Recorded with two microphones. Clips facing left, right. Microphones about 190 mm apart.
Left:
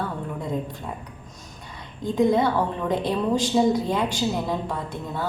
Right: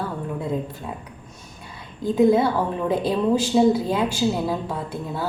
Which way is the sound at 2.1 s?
5° right (ahead or behind).